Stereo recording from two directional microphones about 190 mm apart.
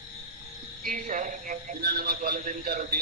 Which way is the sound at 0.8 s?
45° right (ahead or behind).